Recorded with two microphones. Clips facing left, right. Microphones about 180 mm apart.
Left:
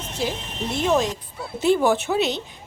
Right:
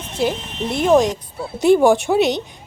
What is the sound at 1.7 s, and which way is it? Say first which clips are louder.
Speech: right 6 dB; 50° right (ahead or behind).